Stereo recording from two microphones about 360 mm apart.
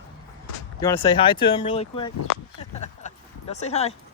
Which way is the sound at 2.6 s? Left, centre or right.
Centre.